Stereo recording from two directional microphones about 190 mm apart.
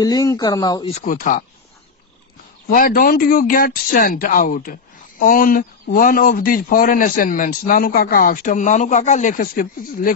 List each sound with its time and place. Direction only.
0.0 s speech: 20° left (ahead or behind)
0.8 s a man's voice: 35° left (ahead or behind)
2.7 s a man's voice: 50° left (ahead or behind)